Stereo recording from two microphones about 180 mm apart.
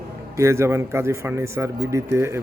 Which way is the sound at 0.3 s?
15° right (ahead or behind).